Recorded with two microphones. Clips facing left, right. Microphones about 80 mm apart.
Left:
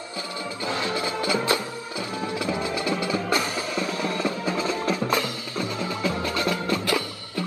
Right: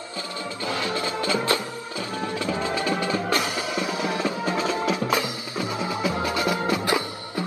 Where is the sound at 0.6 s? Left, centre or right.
Left.